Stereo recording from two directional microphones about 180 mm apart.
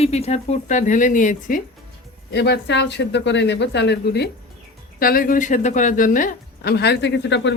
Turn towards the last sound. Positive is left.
turn(degrees=80)